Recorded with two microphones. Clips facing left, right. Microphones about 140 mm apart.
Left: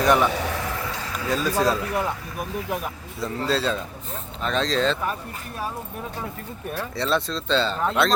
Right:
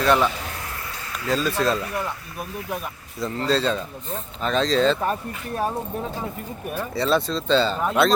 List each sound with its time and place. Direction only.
0.0 s speech: 15° left (ahead or behind)
0.3 s a sound: 90° left
1.3 s speech: 10° left (ahead or behind)
3.2 s speech: 5° left (ahead or behind)
6.9 s speech: centre (ahead or behind)